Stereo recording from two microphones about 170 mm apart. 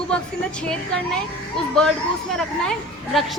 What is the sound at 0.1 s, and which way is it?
Speech, 5° left (ahead or behind).